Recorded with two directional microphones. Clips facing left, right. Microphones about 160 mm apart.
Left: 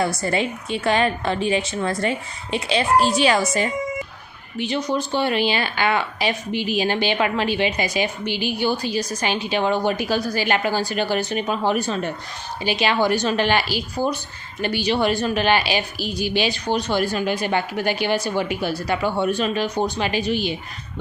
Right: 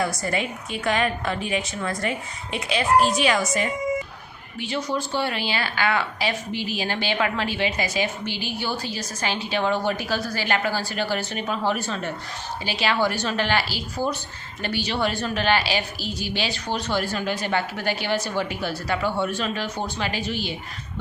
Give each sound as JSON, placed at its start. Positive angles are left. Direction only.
{"t": 0.0, "sound": "a woman's voice", "side_deg": 30}
{"t": 4.5, "sound": "speech", "side_deg": 20}